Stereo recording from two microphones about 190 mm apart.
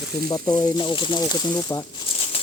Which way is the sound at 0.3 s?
20° left (ahead or behind).